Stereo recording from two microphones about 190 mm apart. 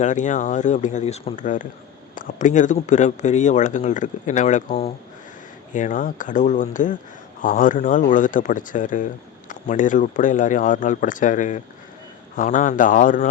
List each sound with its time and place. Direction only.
0.0 s speech: 40° left (ahead or behind)